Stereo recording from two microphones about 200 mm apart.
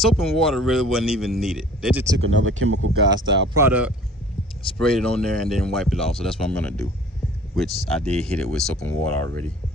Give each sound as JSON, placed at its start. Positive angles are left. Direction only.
{"t": 0.0, "sound": "a man's voice", "side_deg": 0}
{"t": 2.1, "sound": "speech", "side_deg": -70}
{"t": 3.5, "sound": "speech", "side_deg": -10}
{"t": 4.7, "sound": "a man's voice", "side_deg": 5}
{"t": 7.9, "sound": "a man's voice", "side_deg": 5}